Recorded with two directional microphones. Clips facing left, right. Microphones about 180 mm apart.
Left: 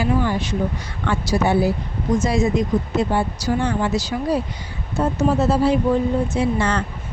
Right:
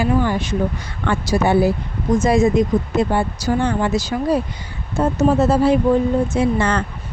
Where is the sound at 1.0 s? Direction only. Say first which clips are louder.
Right 2 dB; 55° right (ahead or behind).